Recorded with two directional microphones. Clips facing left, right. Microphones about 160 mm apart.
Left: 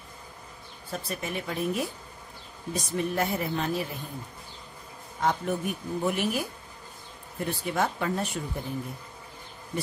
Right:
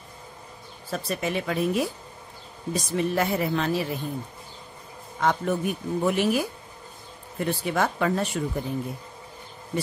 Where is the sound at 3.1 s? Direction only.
90° right.